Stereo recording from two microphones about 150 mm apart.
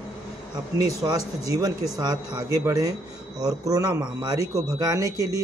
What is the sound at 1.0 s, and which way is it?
Speech, 25° right (ahead or behind).